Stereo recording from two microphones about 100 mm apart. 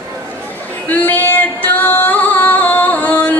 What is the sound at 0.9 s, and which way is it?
Singing, 15° left (ahead or behind).